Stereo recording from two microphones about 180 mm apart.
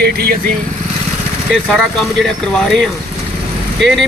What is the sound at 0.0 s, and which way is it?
Speech, 60° right (ahead or behind).